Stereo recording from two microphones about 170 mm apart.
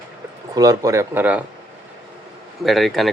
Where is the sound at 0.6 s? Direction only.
20° right (ahead or behind).